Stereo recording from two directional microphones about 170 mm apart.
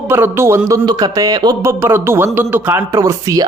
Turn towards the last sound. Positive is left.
turn(degrees=-20)  # may be behind; listen again after turning